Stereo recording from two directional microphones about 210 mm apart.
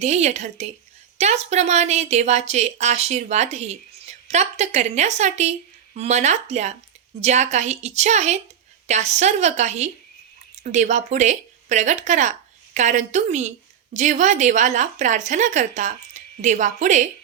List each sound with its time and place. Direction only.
0.0 s speech: 30° right (ahead or behind)